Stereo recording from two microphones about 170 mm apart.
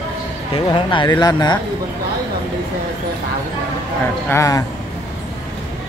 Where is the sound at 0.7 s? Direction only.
30° left (ahead or behind).